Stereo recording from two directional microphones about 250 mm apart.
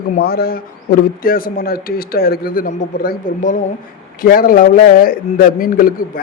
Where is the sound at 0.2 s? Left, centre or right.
Left.